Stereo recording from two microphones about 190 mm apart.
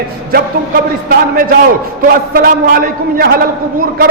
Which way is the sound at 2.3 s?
50° right (ahead or behind).